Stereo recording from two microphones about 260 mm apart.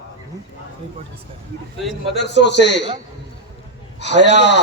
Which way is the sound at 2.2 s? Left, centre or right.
Left.